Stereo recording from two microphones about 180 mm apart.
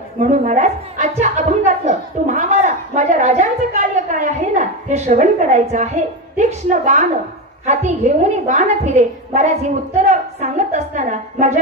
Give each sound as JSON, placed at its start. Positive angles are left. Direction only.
{"t": 0.2, "sound": "music", "side_deg": -40}
{"t": 6.3, "sound": "a woman's voice", "side_deg": -45}